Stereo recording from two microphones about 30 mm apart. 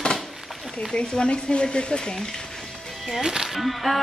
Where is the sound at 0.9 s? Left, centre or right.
Left.